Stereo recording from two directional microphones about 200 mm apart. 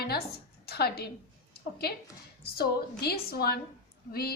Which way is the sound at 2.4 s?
50° left (ahead or behind).